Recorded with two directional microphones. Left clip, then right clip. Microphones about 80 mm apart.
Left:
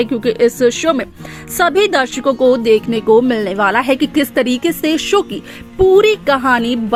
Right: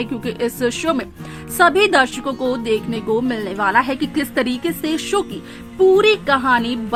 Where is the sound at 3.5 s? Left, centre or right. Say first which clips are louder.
Left 2 dB; left.